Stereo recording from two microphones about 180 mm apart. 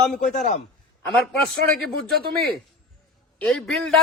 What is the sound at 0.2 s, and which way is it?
Speech, 45° left (ahead or behind).